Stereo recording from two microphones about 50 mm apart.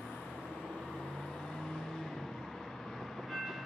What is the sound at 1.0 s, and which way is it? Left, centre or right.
Vehicle, centre.